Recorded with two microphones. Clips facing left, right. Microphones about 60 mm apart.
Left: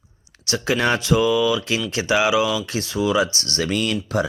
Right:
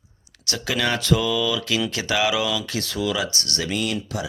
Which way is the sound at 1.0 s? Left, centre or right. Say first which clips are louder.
Left 4 dB; centre.